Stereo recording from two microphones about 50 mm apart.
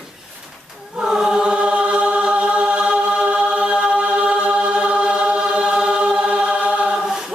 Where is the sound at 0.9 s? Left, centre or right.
Centre.